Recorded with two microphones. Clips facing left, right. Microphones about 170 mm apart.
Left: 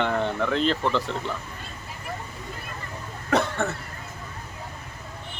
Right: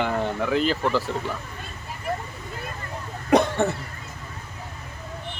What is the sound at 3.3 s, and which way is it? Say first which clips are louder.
Cough: right 5 dB; 15° right (ahead or behind).